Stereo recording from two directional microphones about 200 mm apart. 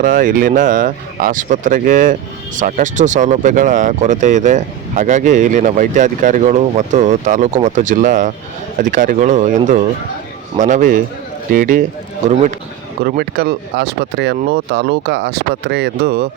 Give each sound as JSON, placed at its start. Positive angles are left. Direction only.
{"t": 0.0, "sound": "speech", "side_deg": -40}
{"t": 13.0, "sound": "speech", "side_deg": -50}